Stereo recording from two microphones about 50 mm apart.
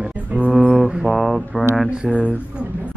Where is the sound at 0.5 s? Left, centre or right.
Right.